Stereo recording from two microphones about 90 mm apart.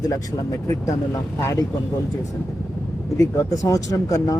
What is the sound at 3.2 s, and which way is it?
Speech, 35° left (ahead or behind).